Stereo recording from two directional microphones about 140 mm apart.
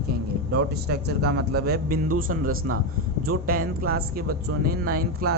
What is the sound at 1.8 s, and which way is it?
A man's voice, 85° right.